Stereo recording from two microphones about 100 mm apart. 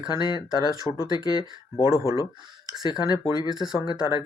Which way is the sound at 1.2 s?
50° left (ahead or behind).